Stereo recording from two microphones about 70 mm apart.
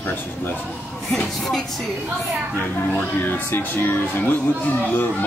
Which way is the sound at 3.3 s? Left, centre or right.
Left.